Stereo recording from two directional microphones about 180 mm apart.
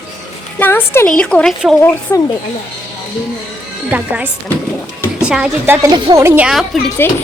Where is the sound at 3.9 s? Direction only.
10° right (ahead or behind).